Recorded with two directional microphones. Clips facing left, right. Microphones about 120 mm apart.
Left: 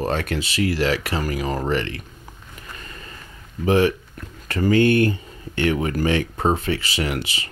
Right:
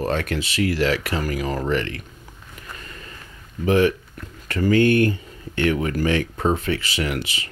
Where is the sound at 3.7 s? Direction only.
30° left (ahead or behind).